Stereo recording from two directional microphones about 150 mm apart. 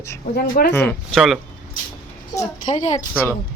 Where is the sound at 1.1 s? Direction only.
Centre (ahead or behind).